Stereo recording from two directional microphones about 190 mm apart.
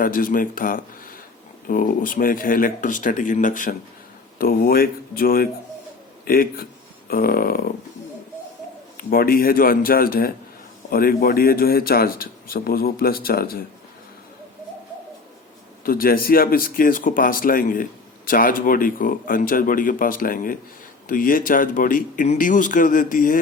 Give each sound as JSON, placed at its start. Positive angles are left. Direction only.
{"t": 0.0, "sound": "speech", "side_deg": 45}
{"t": 9.0, "sound": "speech", "side_deg": 50}
{"t": 15.8, "sound": "speech", "side_deg": 50}